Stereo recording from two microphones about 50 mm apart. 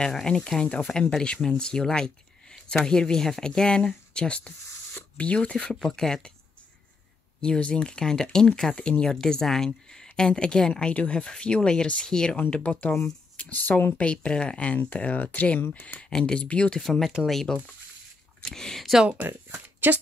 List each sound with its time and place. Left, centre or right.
0.0 s speech: centre
5.8 s speech: centre
7.4 s speech: centre
12.4 s speech: left
13.4 s speech: left
13.9 s speech: left
16.1 s speech: centre
16.7 s speech: centre
19.1 s speech: right